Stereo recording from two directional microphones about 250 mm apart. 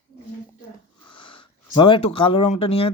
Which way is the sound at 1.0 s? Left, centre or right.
Centre.